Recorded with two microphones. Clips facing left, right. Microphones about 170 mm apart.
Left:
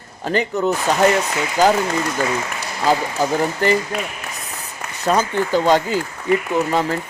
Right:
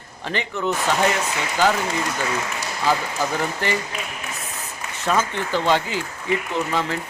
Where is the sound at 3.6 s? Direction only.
40° left (ahead or behind).